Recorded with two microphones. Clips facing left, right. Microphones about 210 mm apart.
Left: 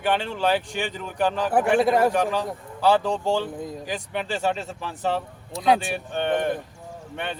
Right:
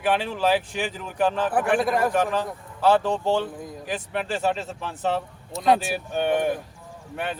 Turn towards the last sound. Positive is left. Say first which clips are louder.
# right 1 dB
turn(degrees=-5)  # may be behind; listen again after turning